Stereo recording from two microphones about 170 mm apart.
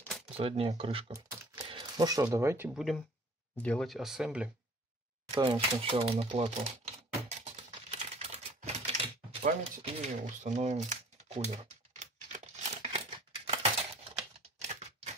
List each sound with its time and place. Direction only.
0.4 s speech: 35° right (ahead or behind)
1.1 s speech: 20° right (ahead or behind)
2.7 s speech: centre (ahead or behind)
5.3 s typewriter: 30° right (ahead or behind)
9.6 s speech: 35° right (ahead or behind)
12.8 s crumpling: 30° right (ahead or behind)
14.6 s typewriter: 40° right (ahead or behind)